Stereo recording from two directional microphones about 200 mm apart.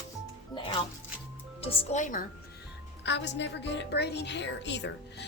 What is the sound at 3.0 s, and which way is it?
A woman's voice, 65° left (ahead or behind).